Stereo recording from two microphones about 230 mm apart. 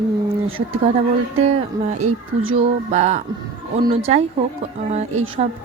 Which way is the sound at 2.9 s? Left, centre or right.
Right.